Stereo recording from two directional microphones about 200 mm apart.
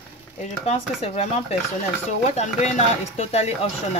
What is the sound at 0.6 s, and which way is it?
Speech, 30° left (ahead or behind).